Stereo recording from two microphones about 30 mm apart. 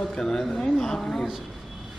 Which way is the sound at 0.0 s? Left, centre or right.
Centre.